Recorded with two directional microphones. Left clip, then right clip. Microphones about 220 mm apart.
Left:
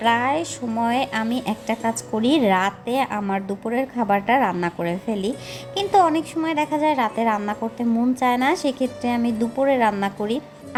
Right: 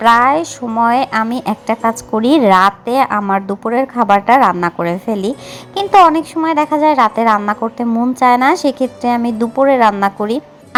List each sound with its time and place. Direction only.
0.0 s speech: 15° right (ahead or behind)